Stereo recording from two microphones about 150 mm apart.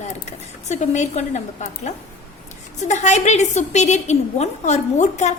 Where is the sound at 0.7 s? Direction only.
50° left (ahead or behind).